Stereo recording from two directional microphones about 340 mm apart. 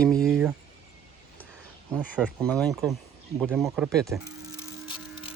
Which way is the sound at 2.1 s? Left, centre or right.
Centre.